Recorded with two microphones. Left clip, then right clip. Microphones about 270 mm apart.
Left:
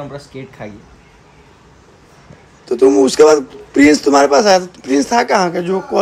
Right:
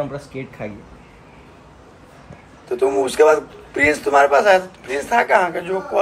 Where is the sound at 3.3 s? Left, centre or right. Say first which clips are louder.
Left 6 dB; left.